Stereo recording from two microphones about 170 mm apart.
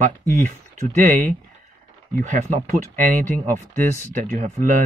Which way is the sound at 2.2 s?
45° right (ahead or behind).